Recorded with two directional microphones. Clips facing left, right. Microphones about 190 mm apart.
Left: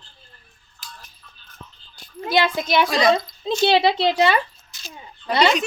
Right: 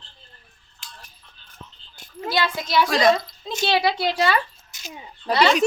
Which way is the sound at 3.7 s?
25° left (ahead or behind).